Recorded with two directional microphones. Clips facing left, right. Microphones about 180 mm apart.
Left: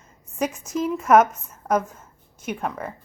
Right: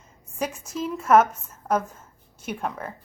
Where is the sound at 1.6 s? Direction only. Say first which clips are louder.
Left 2 dB; 10° left (ahead or behind).